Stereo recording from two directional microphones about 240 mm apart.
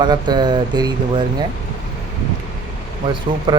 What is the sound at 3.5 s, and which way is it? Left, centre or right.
Speech, centre.